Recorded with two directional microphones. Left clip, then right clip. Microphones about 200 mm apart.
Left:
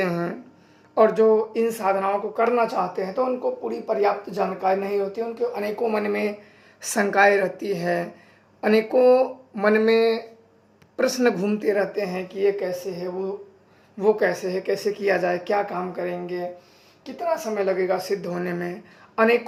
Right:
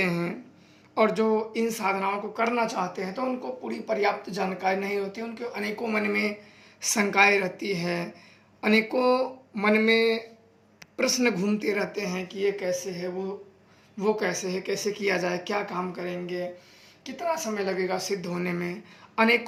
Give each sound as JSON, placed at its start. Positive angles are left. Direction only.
{"t": 0.0, "sound": "a sound", "side_deg": -25}
{"t": 0.9, "sound": "speech", "side_deg": -25}
{"t": 6.8, "sound": "speech", "side_deg": -20}
{"t": 14.0, "sound": "speech", "side_deg": -30}